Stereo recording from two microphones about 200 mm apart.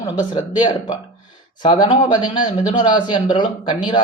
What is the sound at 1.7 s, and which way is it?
Speech, 25° left (ahead or behind).